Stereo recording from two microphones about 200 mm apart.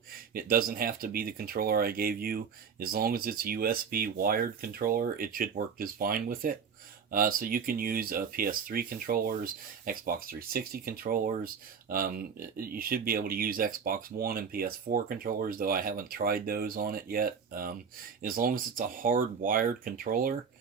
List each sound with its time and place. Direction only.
0.3 s speech: 45° right (ahead or behind)